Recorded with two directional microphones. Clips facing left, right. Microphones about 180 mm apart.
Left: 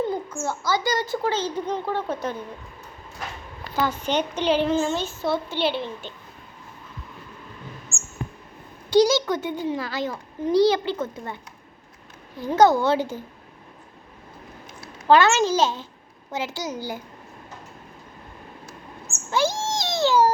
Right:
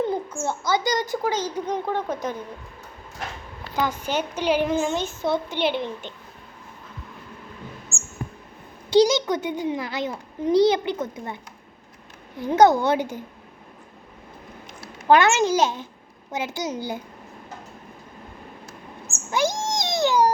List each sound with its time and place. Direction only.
0.4 s a child's voice: 20° right (ahead or behind)
3.8 s a child's voice: 10° right (ahead or behind)
8.9 s a child's voice: 20° right (ahead or behind)
12.4 s a child's voice: 20° right (ahead or behind)
15.0 s a child's voice: 15° right (ahead or behind)
19.3 s a sound: 15° right (ahead or behind)